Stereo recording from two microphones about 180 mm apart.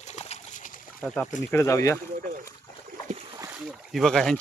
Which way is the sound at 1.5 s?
15° left (ahead or behind).